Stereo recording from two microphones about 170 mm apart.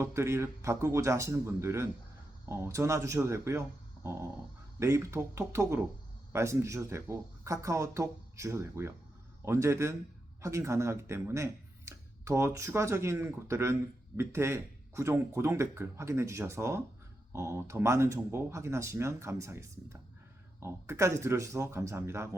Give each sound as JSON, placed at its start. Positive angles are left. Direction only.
{"t": 0.0, "sound": "speech", "side_deg": -15}
{"t": 4.0, "sound": "dog", "side_deg": -15}
{"t": 4.8, "sound": "speech", "side_deg": -15}